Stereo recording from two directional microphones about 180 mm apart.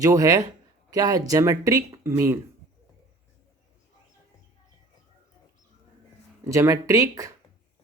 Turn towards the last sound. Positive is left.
turn(degrees=-20)  # may be behind; listen again after turning